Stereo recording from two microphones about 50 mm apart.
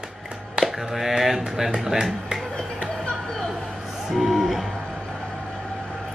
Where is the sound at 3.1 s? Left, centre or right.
Centre.